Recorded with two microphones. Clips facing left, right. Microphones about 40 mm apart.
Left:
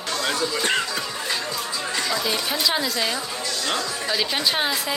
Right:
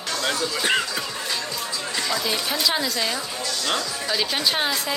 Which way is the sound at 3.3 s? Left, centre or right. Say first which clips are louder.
Even; centre.